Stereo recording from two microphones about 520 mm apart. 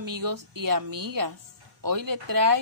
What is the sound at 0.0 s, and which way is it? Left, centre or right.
Speech, right.